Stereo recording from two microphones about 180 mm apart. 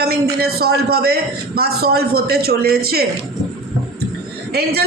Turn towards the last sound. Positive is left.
turn(degrees=-60)  # may be behind; listen again after turning